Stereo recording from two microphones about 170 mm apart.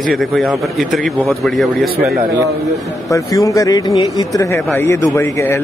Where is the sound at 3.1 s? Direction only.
20° left (ahead or behind).